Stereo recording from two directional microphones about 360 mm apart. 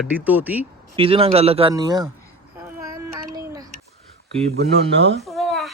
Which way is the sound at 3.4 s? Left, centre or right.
Centre.